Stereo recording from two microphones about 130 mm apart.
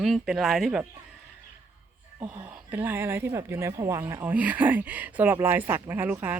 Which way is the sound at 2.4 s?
15° right (ahead or behind).